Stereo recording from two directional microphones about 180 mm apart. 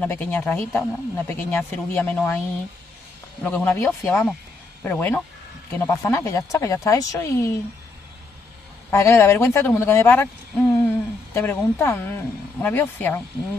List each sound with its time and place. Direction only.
0.0 s speech: 10° left (ahead or behind)
3.4 s speech: 10° left (ahead or behind)
8.9 s speech: 15° left (ahead or behind)